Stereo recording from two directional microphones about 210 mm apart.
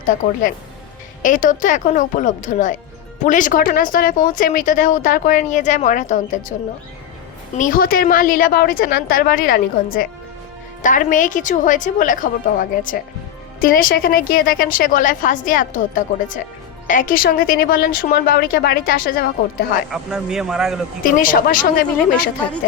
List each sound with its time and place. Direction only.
0.0 s speech: 40° left (ahead or behind)
7.5 s speech: 40° left (ahead or behind)
19.9 s a man's voice: 5° right (ahead or behind)
21.0 s speech: 40° left (ahead or behind)